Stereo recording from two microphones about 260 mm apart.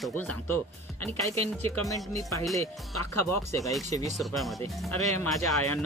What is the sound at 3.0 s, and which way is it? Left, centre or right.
Speech, left.